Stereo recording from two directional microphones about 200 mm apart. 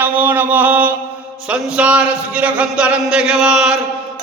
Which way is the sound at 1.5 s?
5° right (ahead or behind).